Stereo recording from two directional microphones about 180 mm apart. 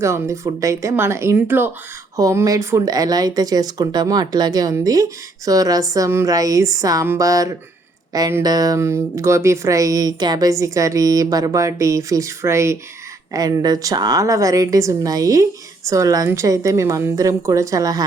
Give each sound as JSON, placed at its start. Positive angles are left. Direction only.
{"t": 0.0, "sound": "speech", "side_deg": -15}